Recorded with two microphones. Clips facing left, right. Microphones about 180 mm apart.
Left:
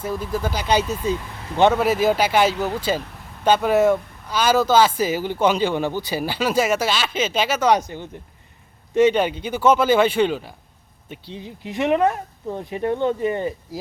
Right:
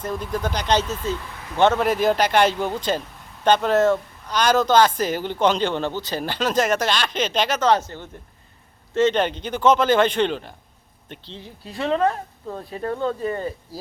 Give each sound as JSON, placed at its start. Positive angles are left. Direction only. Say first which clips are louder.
{"t": 0.0, "sound": "speech", "louder": "left 1 dB", "side_deg": 5}